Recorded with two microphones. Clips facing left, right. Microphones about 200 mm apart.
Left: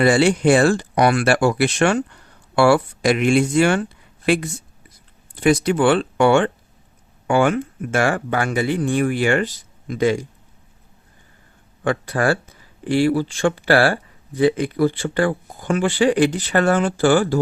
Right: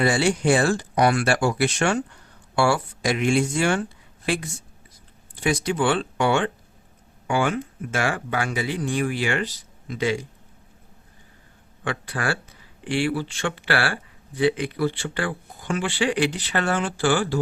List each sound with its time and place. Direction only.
0.0 s speech: 60° left (ahead or behind)
5.4 s a man's voice: 55° left (ahead or behind)
11.8 s a man's voice: 45° left (ahead or behind)